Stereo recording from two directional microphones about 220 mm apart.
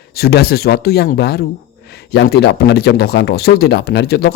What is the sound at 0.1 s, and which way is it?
Speech, 45° left (ahead or behind).